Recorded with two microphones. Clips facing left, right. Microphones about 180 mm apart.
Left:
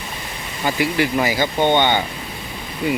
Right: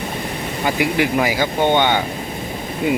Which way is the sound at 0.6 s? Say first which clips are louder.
Right 1 dB; 15° right (ahead or behind).